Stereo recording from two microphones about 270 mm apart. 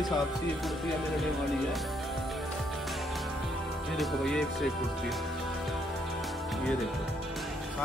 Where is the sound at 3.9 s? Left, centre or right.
Centre.